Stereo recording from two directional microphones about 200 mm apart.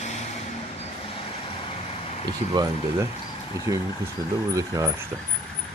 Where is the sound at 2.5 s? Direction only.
20° right (ahead or behind).